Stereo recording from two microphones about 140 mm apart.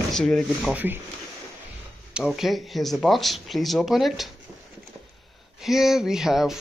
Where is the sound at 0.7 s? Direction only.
15° right (ahead or behind).